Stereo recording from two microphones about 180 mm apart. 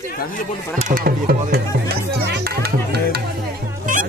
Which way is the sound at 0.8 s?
45° right (ahead or behind).